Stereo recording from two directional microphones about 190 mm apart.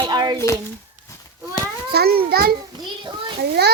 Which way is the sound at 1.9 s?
55° right (ahead or behind).